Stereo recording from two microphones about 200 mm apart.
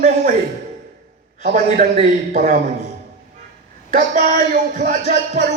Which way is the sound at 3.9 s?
40° right (ahead or behind).